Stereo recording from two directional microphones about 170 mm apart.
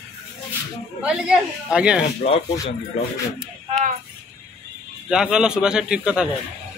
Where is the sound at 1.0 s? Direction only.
5° right (ahead or behind).